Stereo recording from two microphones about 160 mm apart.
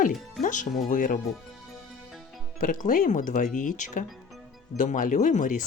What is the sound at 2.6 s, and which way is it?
Speech, 55° left (ahead or behind).